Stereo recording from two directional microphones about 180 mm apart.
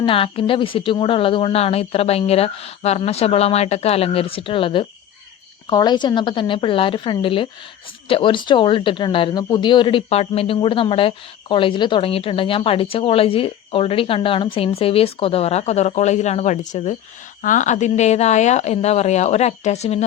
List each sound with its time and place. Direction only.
0.0 s a woman's voice: 30° left (ahead or behind)